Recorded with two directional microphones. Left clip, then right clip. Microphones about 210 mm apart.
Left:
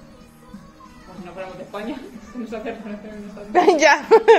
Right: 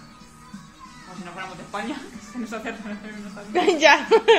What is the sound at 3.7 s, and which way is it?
Speech, 20° left (ahead or behind).